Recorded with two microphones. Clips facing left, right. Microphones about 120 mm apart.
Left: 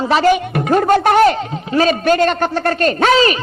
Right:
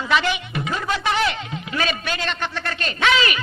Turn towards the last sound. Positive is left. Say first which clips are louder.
# left 8 dB
turn(degrees=35)  # may be behind; listen again after turning